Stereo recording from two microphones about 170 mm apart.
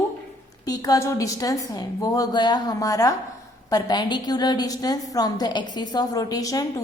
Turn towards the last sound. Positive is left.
turn(degrees=20)  # may be behind; listen again after turning